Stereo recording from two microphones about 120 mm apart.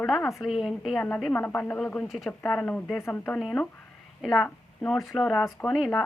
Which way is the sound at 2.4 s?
10° left (ahead or behind).